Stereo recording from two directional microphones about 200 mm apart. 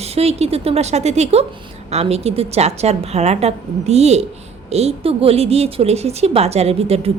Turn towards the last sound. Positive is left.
turn(degrees=-30)  # may be behind; listen again after turning